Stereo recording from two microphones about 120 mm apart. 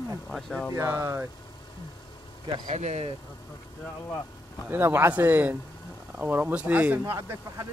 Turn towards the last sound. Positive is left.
turn(degrees=-25)  # may be behind; listen again after turning